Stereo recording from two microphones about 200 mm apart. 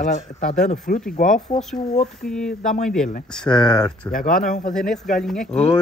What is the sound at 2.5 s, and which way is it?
Speech, 40° left (ahead or behind).